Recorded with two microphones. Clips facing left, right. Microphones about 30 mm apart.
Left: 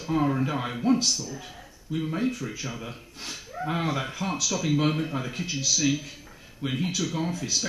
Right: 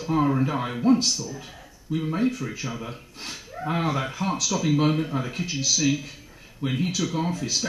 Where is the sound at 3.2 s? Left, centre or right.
Centre.